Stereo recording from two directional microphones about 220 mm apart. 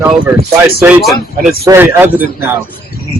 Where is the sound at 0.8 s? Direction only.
5° right (ahead or behind).